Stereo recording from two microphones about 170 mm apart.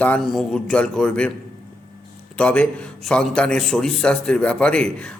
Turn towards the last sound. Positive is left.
turn(degrees=5)  # may be behind; listen again after turning